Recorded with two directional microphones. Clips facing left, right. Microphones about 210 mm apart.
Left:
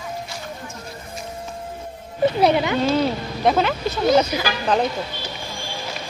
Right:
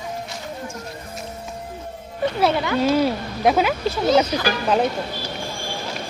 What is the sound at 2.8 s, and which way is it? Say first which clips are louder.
Speech: right 1 dB; 5° right (ahead or behind).